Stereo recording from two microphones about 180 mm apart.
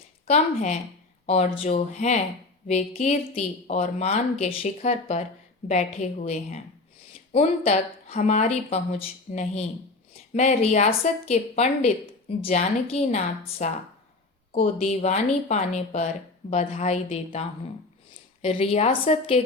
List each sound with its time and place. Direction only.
0.3 s a woman's voice: 40° left (ahead or behind)
18.4 s a woman's voice: 35° left (ahead or behind)